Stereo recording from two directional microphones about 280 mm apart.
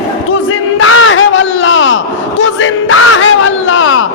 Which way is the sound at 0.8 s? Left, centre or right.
Left.